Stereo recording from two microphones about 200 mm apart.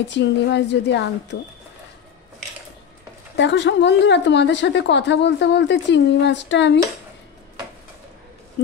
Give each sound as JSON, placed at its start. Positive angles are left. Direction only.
{"t": 0.1, "sound": "a woman's voice", "side_deg": 60}
{"t": 3.3, "sound": "a woman's voice", "side_deg": 60}
{"t": 8.6, "sound": "speech", "side_deg": 60}